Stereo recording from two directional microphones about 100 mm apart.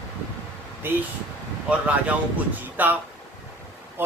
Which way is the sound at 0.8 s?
20° right (ahead or behind).